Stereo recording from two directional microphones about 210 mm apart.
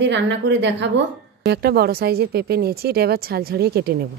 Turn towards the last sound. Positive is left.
turn(degrees=-50)  # may be behind; listen again after turning